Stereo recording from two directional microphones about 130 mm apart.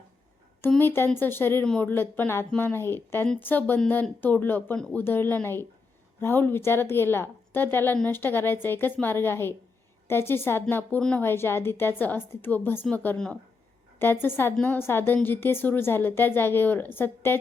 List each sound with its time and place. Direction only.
0.8 s a woman's voice: 15° left (ahead or behind)